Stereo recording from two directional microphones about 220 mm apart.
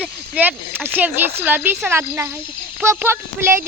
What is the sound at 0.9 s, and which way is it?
Speech, 10° right (ahead or behind).